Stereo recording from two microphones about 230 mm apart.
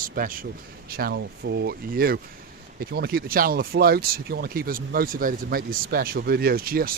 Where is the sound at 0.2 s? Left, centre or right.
Right.